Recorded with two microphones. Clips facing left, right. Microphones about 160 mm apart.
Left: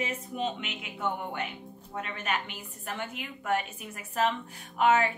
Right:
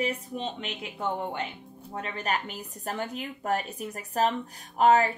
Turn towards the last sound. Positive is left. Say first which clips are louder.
# right 3 dB
turn(degrees=-40)  # may be behind; listen again after turning